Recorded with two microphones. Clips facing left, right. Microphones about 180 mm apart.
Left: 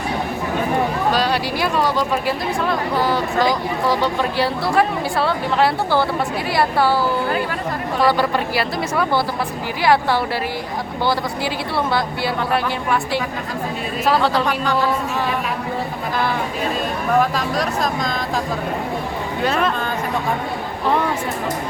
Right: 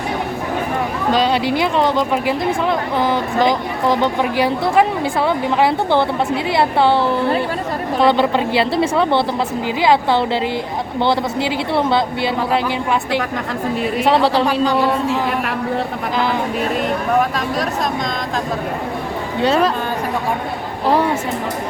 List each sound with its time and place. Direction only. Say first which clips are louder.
1.1 s speech: right 4 dB; 20° right (ahead or behind)
14.0 s speech: right 2 dB; 30° right (ahead or behind)
14.4 s a man's voice: right 4 dB; 15° right (ahead or behind)
17.2 s speech: even; centre (ahead or behind)
19.4 s speech: right 5 dB; 30° right (ahead or behind)